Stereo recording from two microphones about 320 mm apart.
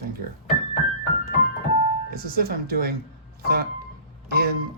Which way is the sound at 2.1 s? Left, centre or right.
Right.